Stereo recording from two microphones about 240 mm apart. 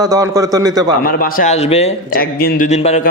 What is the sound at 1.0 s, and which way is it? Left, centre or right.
A man's voice, left.